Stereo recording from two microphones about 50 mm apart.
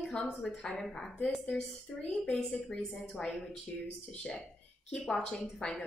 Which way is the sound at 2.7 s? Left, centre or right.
Left.